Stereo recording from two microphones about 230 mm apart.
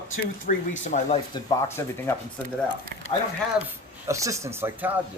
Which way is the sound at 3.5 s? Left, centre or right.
Centre.